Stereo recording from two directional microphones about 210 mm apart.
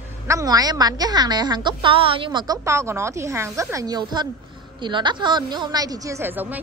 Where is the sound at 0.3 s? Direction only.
15° right (ahead or behind).